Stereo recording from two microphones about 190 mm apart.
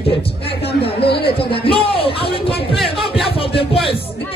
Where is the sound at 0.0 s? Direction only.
30° left (ahead or behind).